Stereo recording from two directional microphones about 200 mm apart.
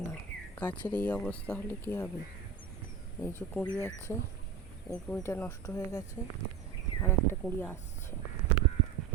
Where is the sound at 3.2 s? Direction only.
10° left (ahead or behind).